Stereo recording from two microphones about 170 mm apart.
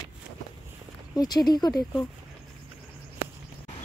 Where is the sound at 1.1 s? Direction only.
25° left (ahead or behind).